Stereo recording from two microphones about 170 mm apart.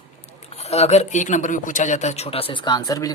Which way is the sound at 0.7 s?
40° left (ahead or behind).